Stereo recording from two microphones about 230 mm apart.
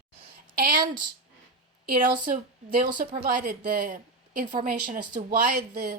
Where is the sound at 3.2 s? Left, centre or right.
Right.